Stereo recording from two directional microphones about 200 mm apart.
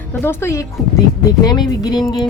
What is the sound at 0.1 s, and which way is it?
Speech, 10° left (ahead or behind).